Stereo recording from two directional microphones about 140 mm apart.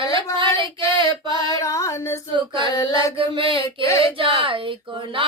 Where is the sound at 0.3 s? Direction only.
35° right (ahead or behind).